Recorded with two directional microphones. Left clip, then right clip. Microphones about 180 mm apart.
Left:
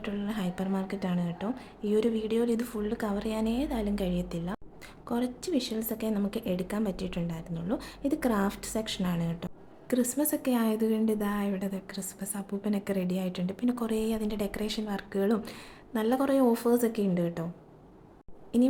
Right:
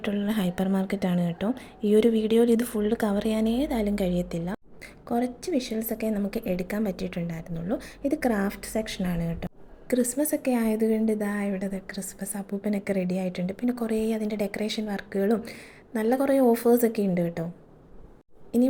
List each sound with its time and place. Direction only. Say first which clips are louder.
0.0 s a woman's voice: right 6 dB; 25° right (ahead or behind); by 17.5 s 10° right (ahead or behind)